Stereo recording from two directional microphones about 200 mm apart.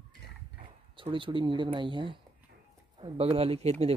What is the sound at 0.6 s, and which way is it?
Speech, 25° right (ahead or behind).